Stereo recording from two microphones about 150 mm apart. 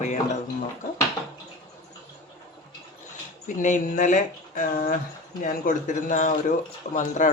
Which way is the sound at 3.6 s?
60° left (ahead or behind).